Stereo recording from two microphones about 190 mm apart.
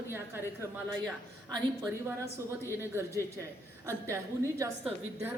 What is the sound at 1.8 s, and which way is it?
A woman's voice, 15° right (ahead or behind).